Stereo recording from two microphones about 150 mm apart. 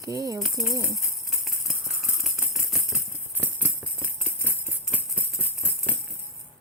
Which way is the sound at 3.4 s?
10° right (ahead or behind).